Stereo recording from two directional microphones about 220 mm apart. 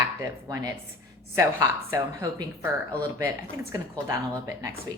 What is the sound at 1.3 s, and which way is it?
A woman's voice, 15° right (ahead or behind).